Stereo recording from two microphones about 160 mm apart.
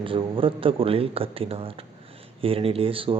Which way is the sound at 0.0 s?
35° right (ahead or behind).